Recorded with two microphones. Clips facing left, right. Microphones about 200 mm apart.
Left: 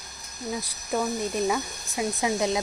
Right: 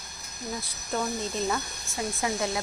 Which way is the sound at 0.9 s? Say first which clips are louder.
Left 3 dB; 10° left (ahead or behind).